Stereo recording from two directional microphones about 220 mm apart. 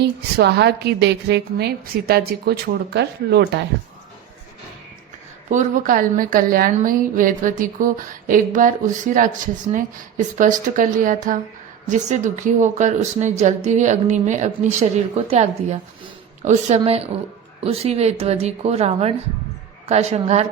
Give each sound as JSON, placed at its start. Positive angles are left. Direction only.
{"t": 0.0, "sound": "a woman's voice", "side_deg": -50}
{"t": 5.5, "sound": "a woman's voice", "side_deg": -35}